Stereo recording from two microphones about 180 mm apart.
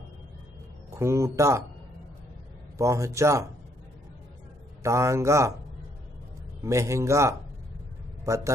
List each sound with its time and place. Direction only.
0.8 s a man's voice: 15° right (ahead or behind)
2.8 s a man's voice: 15° right (ahead or behind)
4.8 s a man's voice: 15° right (ahead or behind)
6.6 s a man's voice: 15° right (ahead or behind)